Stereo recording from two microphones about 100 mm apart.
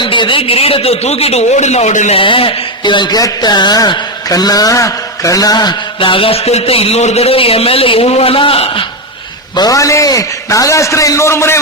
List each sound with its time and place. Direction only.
0.0 s a man's voice: 55° left (ahead or behind); by 1.5 s 90° left
2.0 s speech: 65° left (ahead or behind); by 5.7 s 40° left (ahead or behind)
6.0 s a man's voice: 65° left (ahead or behind)
9.6 s a man's voice: 35° left (ahead or behind)